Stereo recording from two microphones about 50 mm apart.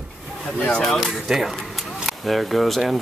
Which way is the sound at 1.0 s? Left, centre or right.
Centre.